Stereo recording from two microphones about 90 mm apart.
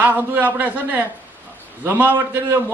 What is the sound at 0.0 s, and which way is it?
A man's voice, 20° right (ahead or behind).